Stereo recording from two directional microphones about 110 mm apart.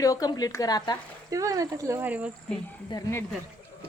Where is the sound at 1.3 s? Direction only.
30° right (ahead or behind).